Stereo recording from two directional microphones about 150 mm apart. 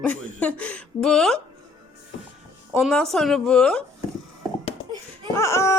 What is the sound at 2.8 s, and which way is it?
A woman's voice, centre (ahead or behind).